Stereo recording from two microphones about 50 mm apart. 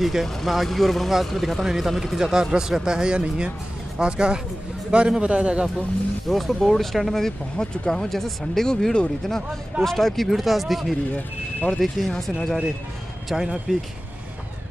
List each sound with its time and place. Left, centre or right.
0.0 s a man's voice: centre; by 5.7 s right
6.2 s speech: centre
8.1 s speech: centre
8.6 s speech: centre
11.1 s speech: left
12.1 s speech: centre
13.3 s speech: centre